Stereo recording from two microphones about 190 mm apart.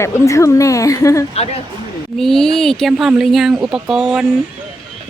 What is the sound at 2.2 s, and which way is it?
Speech, centre (ahead or behind).